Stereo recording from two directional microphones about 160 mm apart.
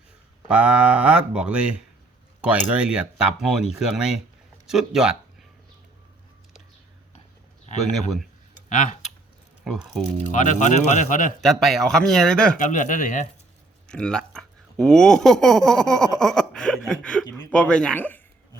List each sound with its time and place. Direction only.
0.4 s speech: 5° right (ahead or behind)
4.6 s a sound: 5° right (ahead or behind)
8.7 s speech: 55° left (ahead or behind)
9.6 s speech: centre (ahead or behind)
10.3 s speech: 50° left (ahead or behind)
11.3 s speech: centre (ahead or behind)
12.5 s speech: 50° left (ahead or behind)
13.8 s speech: 5° left (ahead or behind)